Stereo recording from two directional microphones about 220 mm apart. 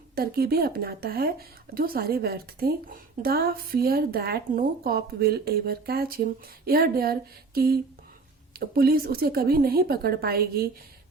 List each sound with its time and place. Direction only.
0.2 s speech: 45° right (ahead or behind)